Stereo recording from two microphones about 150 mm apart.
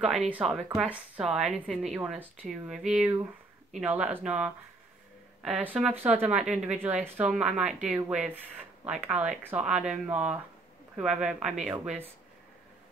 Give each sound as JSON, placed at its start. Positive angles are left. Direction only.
{"t": 0.0, "sound": "a woman's voice", "side_deg": -5}
{"t": 5.6, "sound": "a woman's voice", "side_deg": -10}